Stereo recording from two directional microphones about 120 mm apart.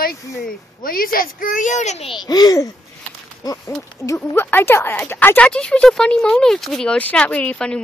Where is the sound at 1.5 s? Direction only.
90° left.